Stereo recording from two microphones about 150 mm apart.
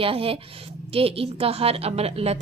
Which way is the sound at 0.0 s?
40° right (ahead or behind).